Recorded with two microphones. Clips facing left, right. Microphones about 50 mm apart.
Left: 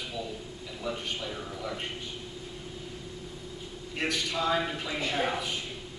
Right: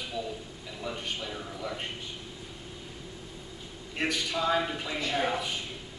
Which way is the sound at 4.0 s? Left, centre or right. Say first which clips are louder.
Even; centre.